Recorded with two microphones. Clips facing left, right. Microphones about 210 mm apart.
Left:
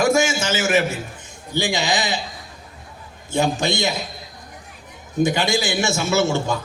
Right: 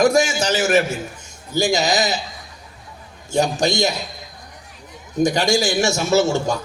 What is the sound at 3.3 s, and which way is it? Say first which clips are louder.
Speech: right 2 dB; 40° right (ahead or behind).